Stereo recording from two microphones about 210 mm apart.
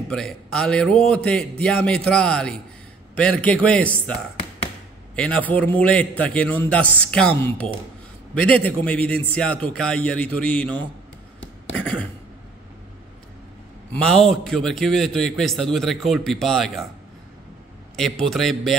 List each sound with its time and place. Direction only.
0.1 s a man's voice: centre (ahead or behind)
5.1 s a man's voice: 5° left (ahead or behind)
13.9 s a man's voice: centre (ahead or behind)
17.9 s a man's voice: centre (ahead or behind)